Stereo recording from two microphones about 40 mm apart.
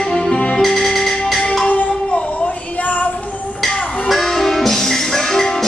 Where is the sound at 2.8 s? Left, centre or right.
Left.